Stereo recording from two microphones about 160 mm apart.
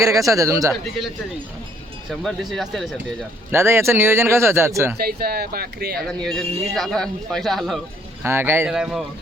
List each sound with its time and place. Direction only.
0.0 s a man's voice: 20° right (ahead or behind)
0.7 s speech: centre (ahead or behind)
3.5 s speech: 15° right (ahead or behind)
4.9 s speech: 75° right (ahead or behind)
6.0 s speech: 5° left (ahead or behind)
8.2 s speech: 15° right (ahead or behind)
8.6 s speech: 5° right (ahead or behind)